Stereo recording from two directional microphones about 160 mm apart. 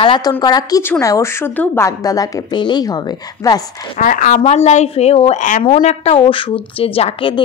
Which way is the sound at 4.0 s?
55° left (ahead or behind).